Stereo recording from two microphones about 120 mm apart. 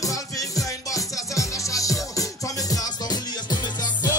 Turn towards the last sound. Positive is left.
turn(degrees=35)  # may be behind; listen again after turning